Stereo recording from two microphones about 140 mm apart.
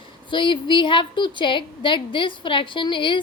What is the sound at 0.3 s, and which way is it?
A woman's voice, 35° left (ahead or behind).